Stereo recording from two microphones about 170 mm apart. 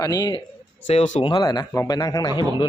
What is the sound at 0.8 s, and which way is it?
A man's voice, 35° left (ahead or behind).